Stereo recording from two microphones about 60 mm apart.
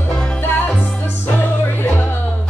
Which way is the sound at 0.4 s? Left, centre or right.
Left.